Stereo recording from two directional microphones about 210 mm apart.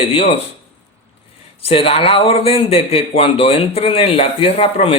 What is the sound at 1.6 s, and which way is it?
Speech, 25° left (ahead or behind).